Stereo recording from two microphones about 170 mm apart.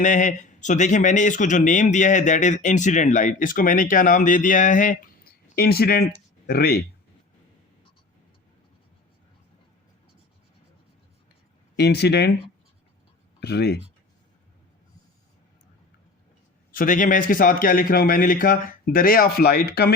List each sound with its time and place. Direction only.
0.0 s a man's voice: 45° left (ahead or behind); by 6.8 s 65° left (ahead or behind)
11.8 s speech: 75° left (ahead or behind)
13.4 s speech: 75° left (ahead or behind)
16.7 s a man's voice: 50° left (ahead or behind)